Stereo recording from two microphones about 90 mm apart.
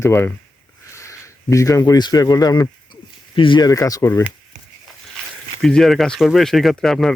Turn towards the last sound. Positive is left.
turn(degrees=5)  # may be behind; listen again after turning